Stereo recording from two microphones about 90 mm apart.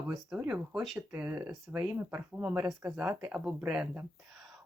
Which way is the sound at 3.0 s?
15° right (ahead or behind).